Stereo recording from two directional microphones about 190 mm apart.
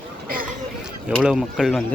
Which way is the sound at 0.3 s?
50° right (ahead or behind).